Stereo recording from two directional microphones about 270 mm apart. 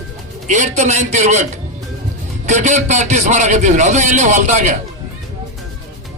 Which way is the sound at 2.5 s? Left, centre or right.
Right.